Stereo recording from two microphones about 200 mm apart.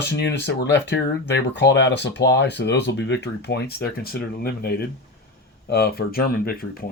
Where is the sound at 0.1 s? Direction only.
60° left (ahead or behind).